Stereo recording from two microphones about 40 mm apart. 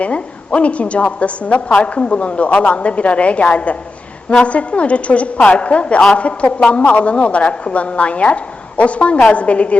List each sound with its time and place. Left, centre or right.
0.0 s a woman's voice: left